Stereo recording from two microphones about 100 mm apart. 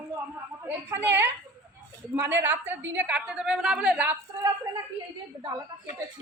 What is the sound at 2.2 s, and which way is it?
A woman's voice, 20° right (ahead or behind).